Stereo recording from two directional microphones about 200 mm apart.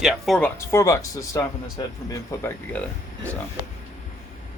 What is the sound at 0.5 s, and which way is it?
Speech, 15° left (ahead or behind).